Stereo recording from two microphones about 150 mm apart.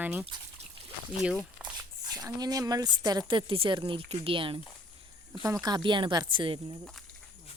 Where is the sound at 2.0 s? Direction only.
25° right (ahead or behind).